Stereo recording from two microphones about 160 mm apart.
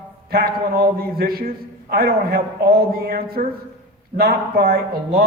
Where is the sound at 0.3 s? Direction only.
70° right (ahead or behind).